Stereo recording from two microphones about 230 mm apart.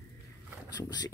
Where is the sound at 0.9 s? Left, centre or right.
Centre.